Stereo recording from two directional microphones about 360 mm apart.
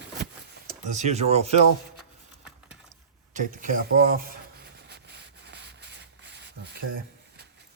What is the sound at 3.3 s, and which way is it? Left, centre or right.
Speech, right.